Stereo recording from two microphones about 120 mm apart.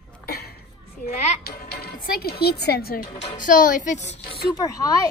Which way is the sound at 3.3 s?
90° left.